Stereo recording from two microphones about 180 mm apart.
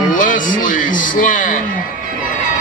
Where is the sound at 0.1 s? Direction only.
45° left (ahead or behind).